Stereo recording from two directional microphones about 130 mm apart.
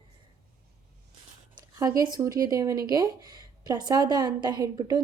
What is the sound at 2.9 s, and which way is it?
A woman's voice, 30° right (ahead or behind).